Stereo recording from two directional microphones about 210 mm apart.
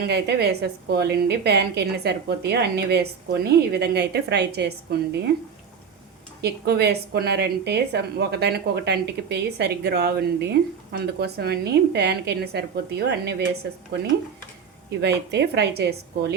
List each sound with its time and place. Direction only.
0.1 s a woman's voice: 50° right (ahead or behind)
6.4 s a woman's voice: 50° right (ahead or behind)
14.8 s a woman's voice: 55° right (ahead or behind)